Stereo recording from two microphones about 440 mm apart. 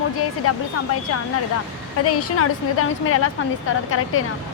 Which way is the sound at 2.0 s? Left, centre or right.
Left.